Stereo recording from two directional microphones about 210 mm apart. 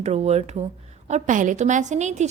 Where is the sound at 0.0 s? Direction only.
30° right (ahead or behind).